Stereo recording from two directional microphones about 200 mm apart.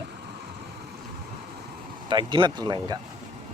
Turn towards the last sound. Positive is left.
turn(degrees=-20)  # may be behind; listen again after turning